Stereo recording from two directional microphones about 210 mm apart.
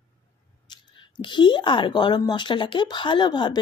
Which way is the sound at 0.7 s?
20° left (ahead or behind).